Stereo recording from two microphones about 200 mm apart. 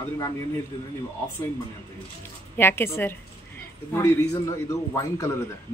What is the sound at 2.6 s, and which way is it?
A man's voice, 10° left (ahead or behind).